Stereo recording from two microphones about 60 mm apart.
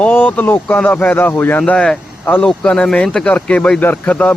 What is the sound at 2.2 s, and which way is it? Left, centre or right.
Speech, left.